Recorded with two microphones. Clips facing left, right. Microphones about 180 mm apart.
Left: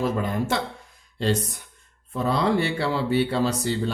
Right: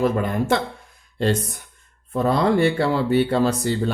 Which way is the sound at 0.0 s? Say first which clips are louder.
Right 4 dB; 55° right (ahead or behind).